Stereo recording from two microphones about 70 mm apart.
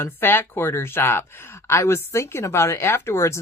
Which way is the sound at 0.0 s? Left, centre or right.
Left.